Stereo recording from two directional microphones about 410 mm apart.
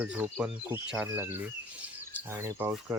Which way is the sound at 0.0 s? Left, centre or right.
Centre.